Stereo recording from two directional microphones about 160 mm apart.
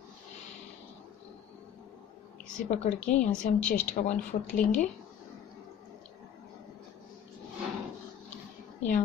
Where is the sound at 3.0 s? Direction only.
5° left (ahead or behind).